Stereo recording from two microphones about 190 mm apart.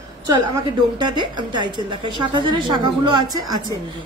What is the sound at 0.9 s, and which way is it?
A woman's voice, 25° right (ahead or behind).